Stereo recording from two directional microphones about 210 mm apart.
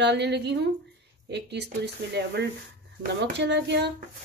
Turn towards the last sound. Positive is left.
turn(degrees=-55)  # may be behind; listen again after turning